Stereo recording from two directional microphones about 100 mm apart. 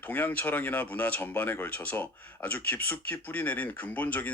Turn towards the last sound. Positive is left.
turn(degrees=15)  # may be behind; listen again after turning